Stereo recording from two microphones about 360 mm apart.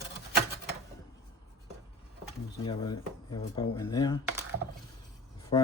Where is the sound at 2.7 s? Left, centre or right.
Centre.